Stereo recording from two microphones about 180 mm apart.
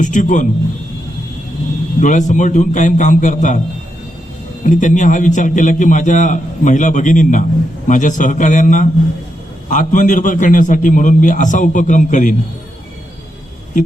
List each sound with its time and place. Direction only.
0.0 s a man's voice: 45° left (ahead or behind)
2.0 s a man's voice: 45° left (ahead or behind)
4.6 s a man's voice: 45° left (ahead or behind)